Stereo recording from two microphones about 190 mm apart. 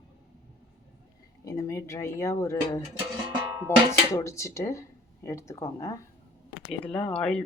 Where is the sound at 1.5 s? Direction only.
15° left (ahead or behind).